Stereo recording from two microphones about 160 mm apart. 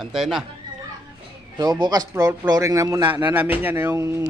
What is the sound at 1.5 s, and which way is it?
A man's voice, 25° right (ahead or behind).